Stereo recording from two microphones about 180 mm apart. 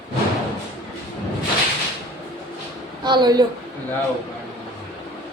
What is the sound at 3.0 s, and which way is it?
Speech, 25° right (ahead or behind).